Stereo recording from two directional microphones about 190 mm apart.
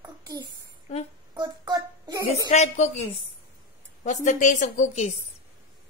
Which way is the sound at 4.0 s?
40° left (ahead or behind).